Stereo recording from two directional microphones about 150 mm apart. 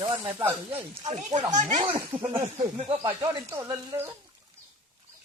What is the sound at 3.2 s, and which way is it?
Speech, 20° right (ahead or behind).